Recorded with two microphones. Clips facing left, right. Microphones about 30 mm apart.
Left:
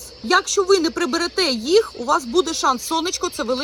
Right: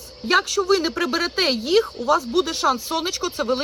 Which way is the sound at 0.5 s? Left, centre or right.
Right.